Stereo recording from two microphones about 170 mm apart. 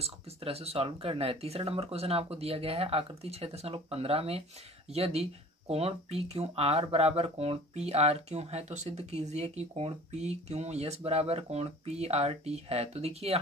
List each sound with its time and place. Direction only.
0.0 s speech: 35° right (ahead or behind)